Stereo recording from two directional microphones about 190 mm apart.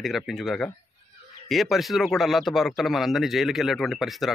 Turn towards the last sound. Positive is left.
turn(degrees=0)  # may be behind; listen again after turning